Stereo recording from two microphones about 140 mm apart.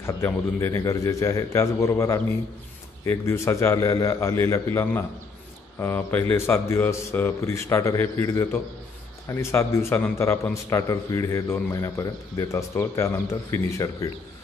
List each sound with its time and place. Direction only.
0.0 s a man's voice: 20° left (ahead or behind)